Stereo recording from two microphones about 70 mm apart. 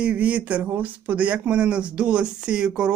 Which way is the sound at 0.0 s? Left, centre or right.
Right.